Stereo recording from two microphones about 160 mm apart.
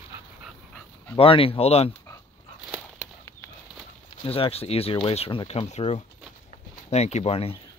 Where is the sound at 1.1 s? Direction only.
35° left (ahead or behind).